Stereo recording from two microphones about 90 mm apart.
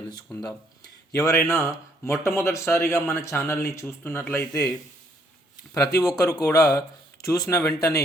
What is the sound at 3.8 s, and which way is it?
Speech, 20° left (ahead or behind).